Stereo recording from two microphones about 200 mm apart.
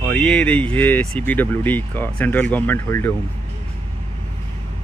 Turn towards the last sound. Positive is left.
turn(degrees=10)  # may be behind; listen again after turning